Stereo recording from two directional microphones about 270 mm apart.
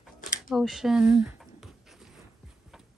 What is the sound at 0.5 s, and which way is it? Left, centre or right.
Speech, centre.